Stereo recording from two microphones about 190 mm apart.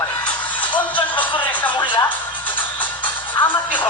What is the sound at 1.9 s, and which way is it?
Music, 10° left (ahead or behind).